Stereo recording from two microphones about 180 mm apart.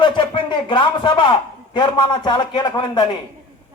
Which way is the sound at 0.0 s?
25° left (ahead or behind).